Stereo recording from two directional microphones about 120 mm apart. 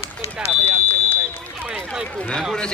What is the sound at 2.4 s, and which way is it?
Speech, 5° left (ahead or behind).